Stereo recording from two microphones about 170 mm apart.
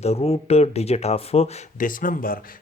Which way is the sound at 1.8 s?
55° left (ahead or behind).